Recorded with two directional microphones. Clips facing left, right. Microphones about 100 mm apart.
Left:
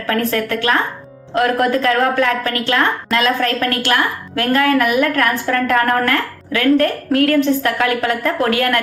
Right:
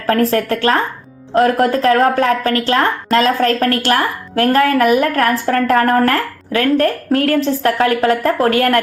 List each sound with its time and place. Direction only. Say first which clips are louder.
0.1 s speech: right 4 dB; 30° right (ahead or behind)